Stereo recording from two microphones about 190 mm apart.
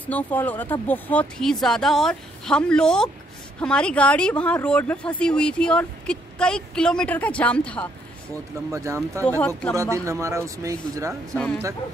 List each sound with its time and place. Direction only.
0.0 s speech: 10° left (ahead or behind)
8.7 s speech: 15° right (ahead or behind)
11.3 s speech: 10° left (ahead or behind)